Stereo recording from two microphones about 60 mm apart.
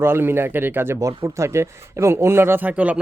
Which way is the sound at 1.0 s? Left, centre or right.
Right.